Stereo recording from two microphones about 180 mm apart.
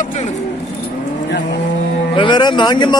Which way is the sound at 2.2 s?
25° left (ahead or behind).